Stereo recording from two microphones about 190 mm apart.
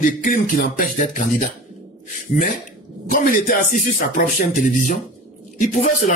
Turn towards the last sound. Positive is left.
turn(degrees=40)  # may be behind; listen again after turning